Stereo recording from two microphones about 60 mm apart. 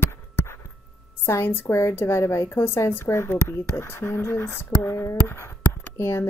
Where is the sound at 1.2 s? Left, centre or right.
Left.